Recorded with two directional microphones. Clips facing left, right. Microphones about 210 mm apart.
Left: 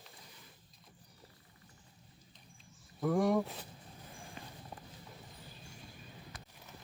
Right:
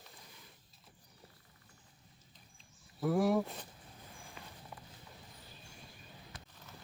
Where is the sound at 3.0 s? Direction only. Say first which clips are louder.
Even; 5° right (ahead or behind).